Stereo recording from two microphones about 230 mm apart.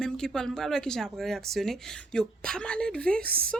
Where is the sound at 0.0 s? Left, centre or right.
Centre.